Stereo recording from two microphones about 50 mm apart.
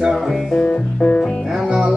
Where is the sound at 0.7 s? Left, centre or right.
Left.